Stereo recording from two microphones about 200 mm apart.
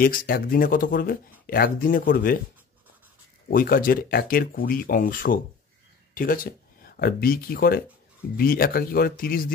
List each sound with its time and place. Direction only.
0.0 s speech: 45° left (ahead or behind)
3.4 s speech: 45° left (ahead or behind)